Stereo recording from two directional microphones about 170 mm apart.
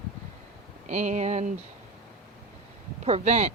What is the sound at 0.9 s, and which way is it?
Speech, 45° right (ahead or behind).